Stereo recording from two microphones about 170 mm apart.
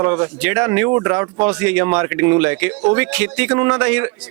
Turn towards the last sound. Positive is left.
turn(degrees=-5)  # may be behind; listen again after turning